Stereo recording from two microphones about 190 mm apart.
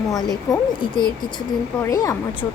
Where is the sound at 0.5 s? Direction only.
25° left (ahead or behind).